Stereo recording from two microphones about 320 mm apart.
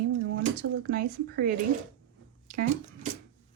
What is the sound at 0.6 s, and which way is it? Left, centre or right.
Speech, right.